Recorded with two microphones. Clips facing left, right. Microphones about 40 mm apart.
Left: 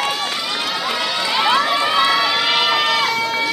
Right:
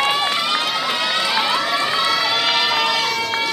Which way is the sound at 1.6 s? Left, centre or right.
Centre.